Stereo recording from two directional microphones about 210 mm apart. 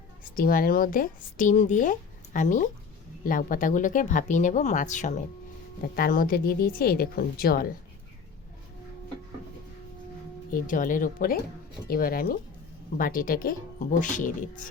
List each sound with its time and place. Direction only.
0.3 s a woman's voice: 45° left (ahead or behind)
10.5 s a woman's voice: 40° left (ahead or behind)